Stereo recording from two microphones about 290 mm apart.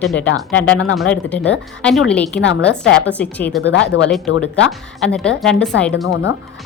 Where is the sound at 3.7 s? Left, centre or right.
Left.